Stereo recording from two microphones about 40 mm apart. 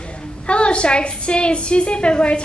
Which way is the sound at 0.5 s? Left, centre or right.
Left.